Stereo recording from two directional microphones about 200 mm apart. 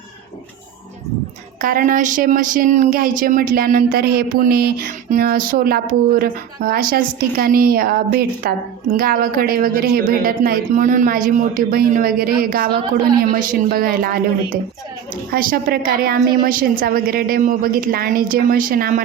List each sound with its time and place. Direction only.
1.6 s speech: 45° right (ahead or behind)
15.3 s speech: 45° right (ahead or behind)